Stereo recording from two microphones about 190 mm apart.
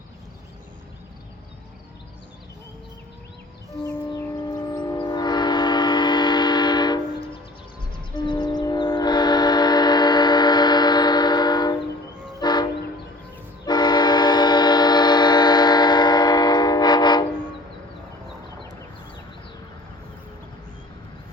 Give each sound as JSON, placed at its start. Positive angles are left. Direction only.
{"t": 3.8, "sound": "train", "side_deg": 20}
{"t": 8.1, "sound": "train", "side_deg": 25}
{"t": 13.7, "sound": "train", "side_deg": 20}